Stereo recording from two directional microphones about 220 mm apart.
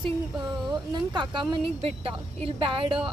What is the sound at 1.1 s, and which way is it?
Speech, 20° right (ahead or behind).